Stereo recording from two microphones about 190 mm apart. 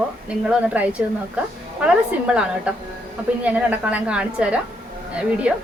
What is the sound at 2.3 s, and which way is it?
A woman's voice, 5° right (ahead or behind).